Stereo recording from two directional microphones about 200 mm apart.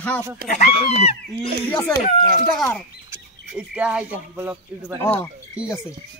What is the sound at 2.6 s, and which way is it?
Speech, 5° left (ahead or behind).